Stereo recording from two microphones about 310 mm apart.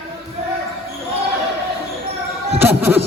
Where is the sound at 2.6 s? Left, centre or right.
Centre.